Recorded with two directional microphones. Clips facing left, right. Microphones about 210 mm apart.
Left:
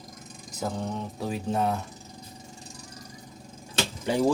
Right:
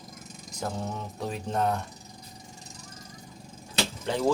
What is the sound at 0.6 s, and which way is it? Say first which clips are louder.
Mantra: left 2 dB; centre (ahead or behind).